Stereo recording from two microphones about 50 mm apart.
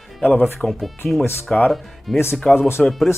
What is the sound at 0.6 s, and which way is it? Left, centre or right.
Speech, centre.